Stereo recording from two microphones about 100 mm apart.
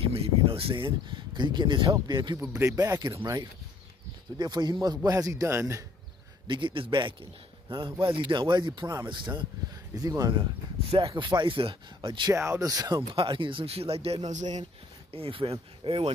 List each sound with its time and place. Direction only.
0.1 s speech: 75° right (ahead or behind); by 2.3 s 45° right (ahead or behind)
2.4 s speech: 35° right (ahead or behind)
4.4 s speech: 45° right (ahead or behind); by 5.9 s 25° right (ahead or behind)
6.4 s speech: 50° right (ahead or behind)
9.9 s speech: 40° right (ahead or behind)
11.1 s speech: 50° right (ahead or behind)
12.3 s speech: 30° right (ahead or behind)
13.1 s speech: 60° right (ahead or behind); by 14.2 s 85° right
15.1 s speech: 65° right (ahead or behind)